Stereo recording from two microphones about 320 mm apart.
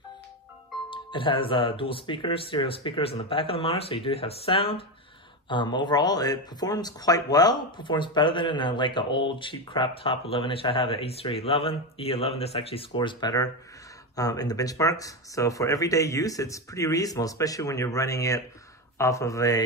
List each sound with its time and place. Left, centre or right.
0.8 s speech: centre